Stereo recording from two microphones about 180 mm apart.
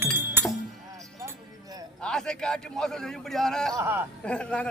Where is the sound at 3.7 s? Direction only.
15° right (ahead or behind).